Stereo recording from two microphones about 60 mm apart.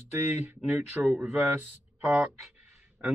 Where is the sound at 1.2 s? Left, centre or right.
Right.